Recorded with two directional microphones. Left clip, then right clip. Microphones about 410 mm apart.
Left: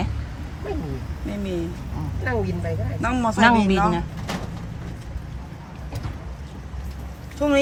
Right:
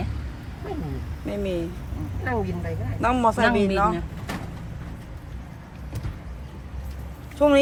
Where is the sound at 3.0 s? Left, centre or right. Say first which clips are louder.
Left 1 dB; centre.